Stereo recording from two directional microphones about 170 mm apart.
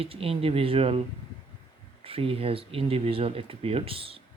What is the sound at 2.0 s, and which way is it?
Speech, 35° right (ahead or behind).